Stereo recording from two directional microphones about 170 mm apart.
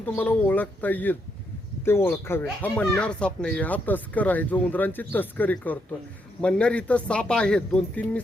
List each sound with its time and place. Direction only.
0.0 s speech: 10° left (ahead or behind)